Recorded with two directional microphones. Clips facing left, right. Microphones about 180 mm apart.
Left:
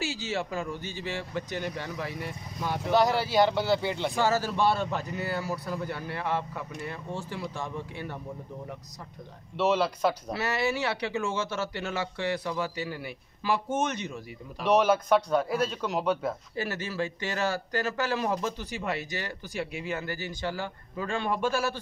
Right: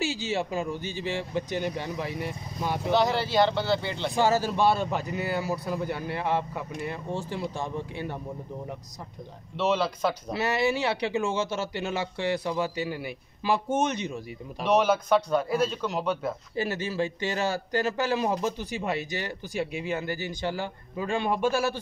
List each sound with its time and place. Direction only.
0.0 s a man's voice: 15° right (ahead or behind)
2.9 s speech: 10° left (ahead or behind)
4.1 s a man's voice: 15° right (ahead or behind)
9.6 s speech: 10° left (ahead or behind)
10.3 s a man's voice: 20° right (ahead or behind)
14.6 s a man's voice: 10° left (ahead or behind)
16.5 s speech: 20° right (ahead or behind)